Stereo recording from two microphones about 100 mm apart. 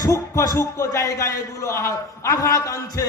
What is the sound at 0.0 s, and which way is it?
Speech, 35° left (ahead or behind).